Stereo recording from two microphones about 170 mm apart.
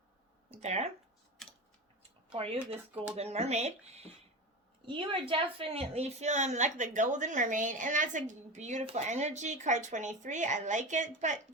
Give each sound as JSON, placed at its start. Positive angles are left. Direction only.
{"t": 0.6, "sound": "speech", "side_deg": -40}
{"t": 1.4, "sound": "mechanisms", "side_deg": 5}
{"t": 2.3, "sound": "a woman's voice", "side_deg": -35}